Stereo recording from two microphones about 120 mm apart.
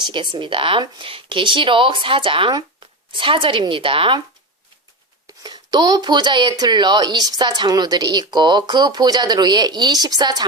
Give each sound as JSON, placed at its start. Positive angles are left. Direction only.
{"t": 0.0, "sound": "speech", "side_deg": -40}
{"t": 5.4, "sound": "speech", "side_deg": -35}